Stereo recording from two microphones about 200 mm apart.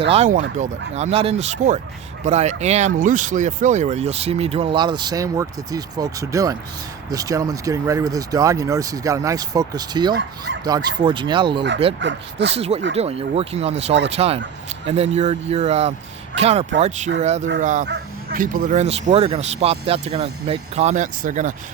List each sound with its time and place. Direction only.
0.1 s speech: 35° right (ahead or behind)
10.2 s speech: 65° right (ahead or behind)
10.6 s speech: 20° right (ahead or behind)
11.9 s speech: 60° right (ahead or behind)
12.5 s speech: 30° right (ahead or behind)
17.8 s bow-wow: 55° right (ahead or behind)
18.3 s speech: 40° right (ahead or behind)